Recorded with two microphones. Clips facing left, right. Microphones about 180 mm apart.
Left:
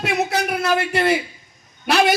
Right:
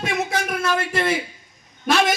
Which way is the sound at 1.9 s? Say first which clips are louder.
Left 2 dB; 65° left (ahead or behind).